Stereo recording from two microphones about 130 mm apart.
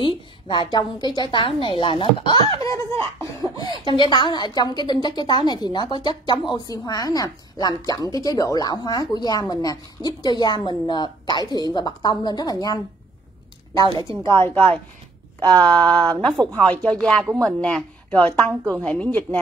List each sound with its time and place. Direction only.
0.0 s a woman's voice: 35° left (ahead or behind)
13.9 s speech: 20° left (ahead or behind); by 17.3 s 5° left (ahead or behind)
17.3 s speech: 25° right (ahead or behind)
17.6 s speech: 5° left (ahead or behind)
18.5 s speech: 20° right (ahead or behind)
18.8 s speech: 10° left (ahead or behind)